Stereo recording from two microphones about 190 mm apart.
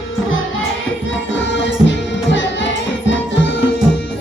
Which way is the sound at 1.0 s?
75° left (ahead or behind).